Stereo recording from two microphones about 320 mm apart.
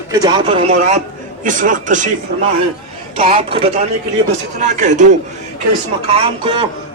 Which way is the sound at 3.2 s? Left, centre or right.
Centre.